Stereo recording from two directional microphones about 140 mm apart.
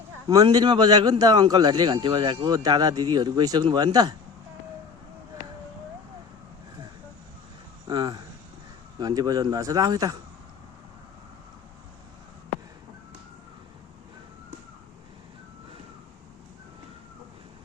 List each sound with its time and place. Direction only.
0.4 s speech: 35° right (ahead or behind)
7.9 s speech: 30° right (ahead or behind)